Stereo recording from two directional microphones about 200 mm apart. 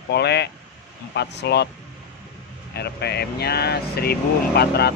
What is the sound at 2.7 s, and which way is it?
Speech, 55° left (ahead or behind).